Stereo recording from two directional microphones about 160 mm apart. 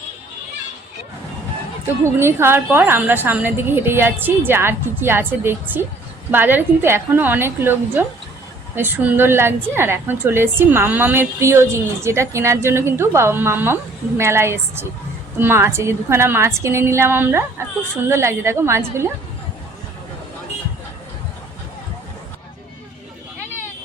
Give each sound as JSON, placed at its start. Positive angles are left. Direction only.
{"t": 2.0, "sound": "a woman's voice", "side_deg": -15}